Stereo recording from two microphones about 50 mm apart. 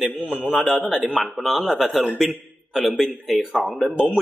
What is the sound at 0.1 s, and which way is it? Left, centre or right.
Speech, left.